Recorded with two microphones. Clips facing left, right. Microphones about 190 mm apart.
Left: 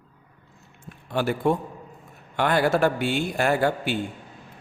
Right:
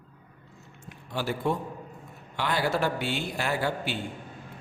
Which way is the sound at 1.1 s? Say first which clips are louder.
Left 6 dB; 55° left (ahead or behind).